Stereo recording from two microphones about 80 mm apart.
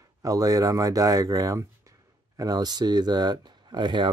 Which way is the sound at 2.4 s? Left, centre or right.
Right.